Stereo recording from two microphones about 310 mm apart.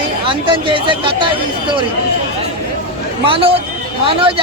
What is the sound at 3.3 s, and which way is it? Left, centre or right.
Speech, centre.